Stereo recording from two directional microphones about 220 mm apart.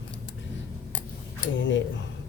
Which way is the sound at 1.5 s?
55° left (ahead or behind).